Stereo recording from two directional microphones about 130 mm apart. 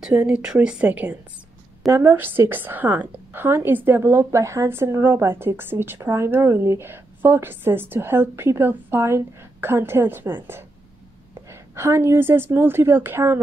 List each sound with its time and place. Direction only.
0.0 s a woman's voice: 10° right (ahead or behind)
11.7 s a woman's voice: 20° right (ahead or behind)